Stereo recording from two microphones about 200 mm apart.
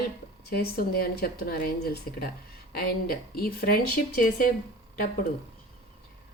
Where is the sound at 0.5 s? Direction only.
50° left (ahead or behind).